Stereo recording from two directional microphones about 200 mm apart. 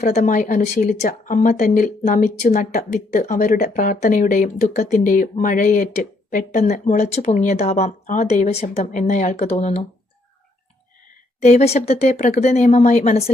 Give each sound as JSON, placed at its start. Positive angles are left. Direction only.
{"t": 0.0, "sound": "speech", "side_deg": 35}
{"t": 11.4, "sound": "speech", "side_deg": 35}